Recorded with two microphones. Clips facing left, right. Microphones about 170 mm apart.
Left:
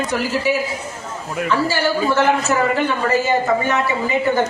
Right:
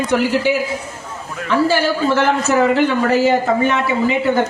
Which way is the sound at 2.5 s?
70° right (ahead or behind).